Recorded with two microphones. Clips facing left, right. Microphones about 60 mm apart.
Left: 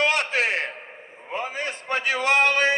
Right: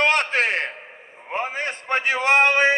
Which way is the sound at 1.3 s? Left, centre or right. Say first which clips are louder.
Right 3 dB; right.